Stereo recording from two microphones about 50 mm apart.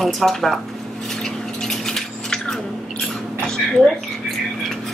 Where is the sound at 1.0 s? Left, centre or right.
Centre.